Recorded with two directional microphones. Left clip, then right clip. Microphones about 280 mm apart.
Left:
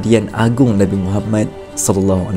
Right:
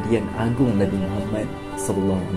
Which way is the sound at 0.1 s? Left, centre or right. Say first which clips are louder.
Left 9 dB; left.